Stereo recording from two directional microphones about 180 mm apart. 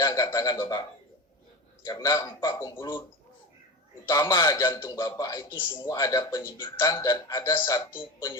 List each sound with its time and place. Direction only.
0.0 s a man's voice: 20° left (ahead or behind)
1.8 s a man's voice: 20° left (ahead or behind)
4.0 s a man's voice: 15° left (ahead or behind)